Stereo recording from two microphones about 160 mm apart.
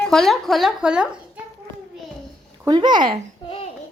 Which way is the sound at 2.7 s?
25° right (ahead or behind).